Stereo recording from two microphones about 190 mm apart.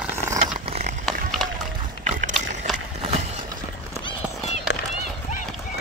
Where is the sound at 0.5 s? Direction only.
35° right (ahead or behind).